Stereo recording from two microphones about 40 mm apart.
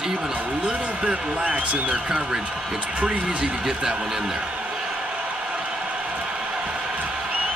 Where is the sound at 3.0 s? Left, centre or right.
Right.